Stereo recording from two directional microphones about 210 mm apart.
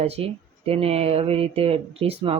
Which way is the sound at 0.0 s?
30° right (ahead or behind).